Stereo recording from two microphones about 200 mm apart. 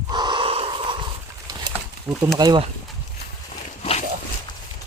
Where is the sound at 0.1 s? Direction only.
20° right (ahead or behind).